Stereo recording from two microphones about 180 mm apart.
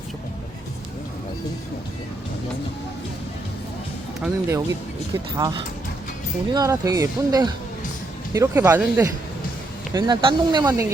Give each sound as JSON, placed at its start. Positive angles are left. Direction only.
{"t": 4.2, "sound": "speech", "side_deg": -10}
{"t": 5.4, "sound": "speech", "side_deg": -25}
{"t": 9.9, "sound": "speech", "side_deg": -25}